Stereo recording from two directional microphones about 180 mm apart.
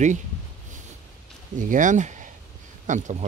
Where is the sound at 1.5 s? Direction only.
45° right (ahead or behind).